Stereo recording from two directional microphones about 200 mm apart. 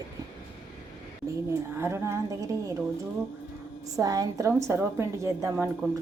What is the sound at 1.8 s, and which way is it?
Speech, 10° right (ahead or behind).